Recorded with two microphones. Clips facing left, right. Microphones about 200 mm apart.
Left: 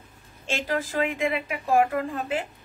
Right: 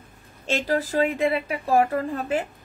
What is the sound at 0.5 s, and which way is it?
Speech, 40° right (ahead or behind).